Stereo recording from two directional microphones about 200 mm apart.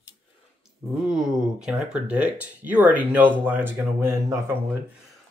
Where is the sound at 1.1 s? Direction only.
5° right (ahead or behind).